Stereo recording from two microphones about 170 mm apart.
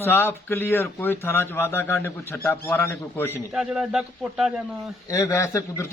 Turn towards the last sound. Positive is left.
turn(degrees=15)  # may be behind; listen again after turning